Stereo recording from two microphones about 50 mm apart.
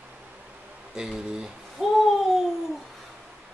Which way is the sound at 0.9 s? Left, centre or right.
Centre.